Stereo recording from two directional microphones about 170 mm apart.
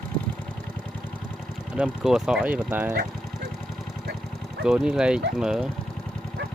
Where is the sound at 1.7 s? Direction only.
5° right (ahead or behind).